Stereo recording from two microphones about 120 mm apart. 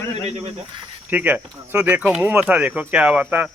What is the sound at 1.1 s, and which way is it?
Speech, 15° right (ahead or behind).